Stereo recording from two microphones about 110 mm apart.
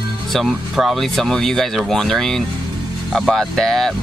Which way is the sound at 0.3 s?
Centre (ahead or behind).